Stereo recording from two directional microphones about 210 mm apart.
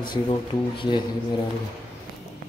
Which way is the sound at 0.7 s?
20° left (ahead or behind).